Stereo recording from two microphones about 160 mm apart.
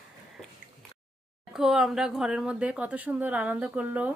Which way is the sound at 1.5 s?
5° right (ahead or behind).